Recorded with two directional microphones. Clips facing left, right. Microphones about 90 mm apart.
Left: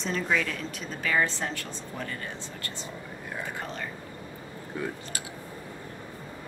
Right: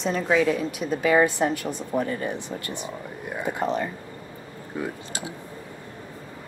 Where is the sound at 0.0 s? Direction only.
10° right (ahead or behind).